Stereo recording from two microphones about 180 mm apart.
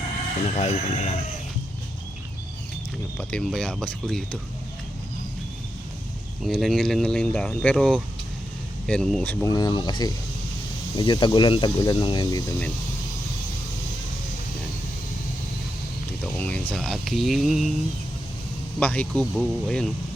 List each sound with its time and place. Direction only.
0.4 s speech: 40° left (ahead or behind)
3.2 s speech: 5° left (ahead or behind)
6.4 s speech: centre (ahead or behind); by 12.5 s 20° left (ahead or behind)
16.4 s speech: 10° left (ahead or behind)
18.8 s speech: 10° left (ahead or behind)